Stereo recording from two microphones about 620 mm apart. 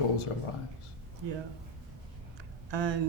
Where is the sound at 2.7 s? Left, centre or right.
Right.